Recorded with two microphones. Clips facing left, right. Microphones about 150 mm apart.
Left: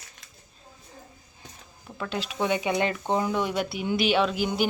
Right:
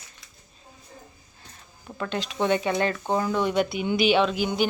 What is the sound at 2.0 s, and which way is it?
Speech, 5° left (ahead or behind).